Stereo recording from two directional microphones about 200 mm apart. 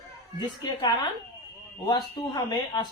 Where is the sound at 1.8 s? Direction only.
20° left (ahead or behind).